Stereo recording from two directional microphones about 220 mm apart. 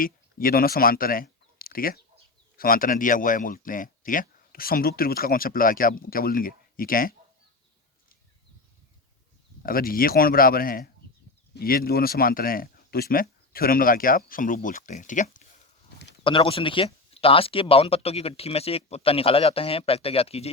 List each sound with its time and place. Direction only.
0.0 s speech: 40° left (ahead or behind)
9.6 s speech: 40° left (ahead or behind)
16.2 s speech: 25° left (ahead or behind)